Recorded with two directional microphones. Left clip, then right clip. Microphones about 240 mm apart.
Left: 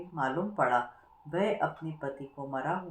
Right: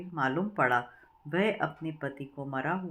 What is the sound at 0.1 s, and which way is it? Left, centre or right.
Speech, right.